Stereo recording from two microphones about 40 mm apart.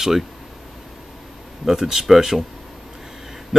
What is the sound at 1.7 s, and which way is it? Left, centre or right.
Speech, centre.